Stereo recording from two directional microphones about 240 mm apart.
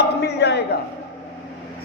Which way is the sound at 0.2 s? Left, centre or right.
Left.